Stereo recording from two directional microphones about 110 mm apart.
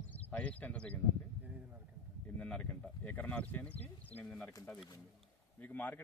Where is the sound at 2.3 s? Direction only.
10° left (ahead or behind).